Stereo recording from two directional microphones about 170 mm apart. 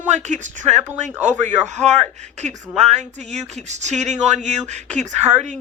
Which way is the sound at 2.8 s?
40° right (ahead or behind).